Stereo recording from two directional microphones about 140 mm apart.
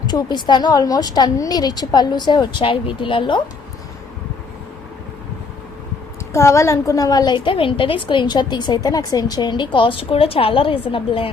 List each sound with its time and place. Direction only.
0.1 s a woman's voice: 30° left (ahead or behind)
6.3 s a woman's voice: 20° left (ahead or behind); by 11.3 s 40° left (ahead or behind)